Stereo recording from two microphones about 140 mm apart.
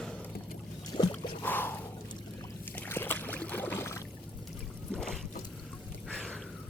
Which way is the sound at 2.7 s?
15° left (ahead or behind).